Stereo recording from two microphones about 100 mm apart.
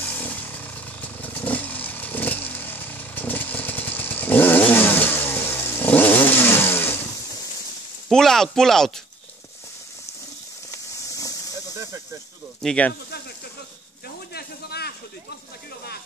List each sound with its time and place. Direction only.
0.2 s motorcycle: 15° left (ahead or behind)
8.1 s speech: 5° left (ahead or behind)
10.7 s a sound: 35° left (ahead or behind)
12.6 s speech: 15° left (ahead or behind)